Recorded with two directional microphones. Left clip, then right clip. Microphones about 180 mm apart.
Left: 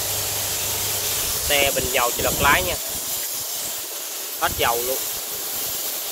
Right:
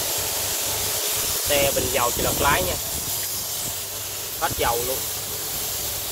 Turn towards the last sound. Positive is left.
turn(degrees=20)  # may be behind; listen again after turning